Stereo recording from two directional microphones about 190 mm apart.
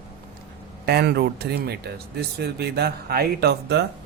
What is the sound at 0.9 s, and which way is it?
Speech, 55° right (ahead or behind).